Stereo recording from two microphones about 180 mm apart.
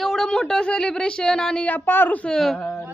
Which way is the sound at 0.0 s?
5° left (ahead or behind).